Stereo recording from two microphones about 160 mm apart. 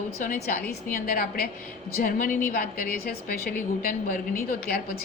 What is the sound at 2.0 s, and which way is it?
A woman's voice, 60° left (ahead or behind).